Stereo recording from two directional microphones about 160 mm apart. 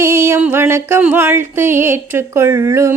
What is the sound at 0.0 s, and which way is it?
Music, 15° right (ahead or behind).